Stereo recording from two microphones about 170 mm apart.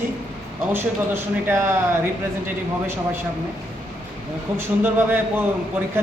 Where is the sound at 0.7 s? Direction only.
10° right (ahead or behind).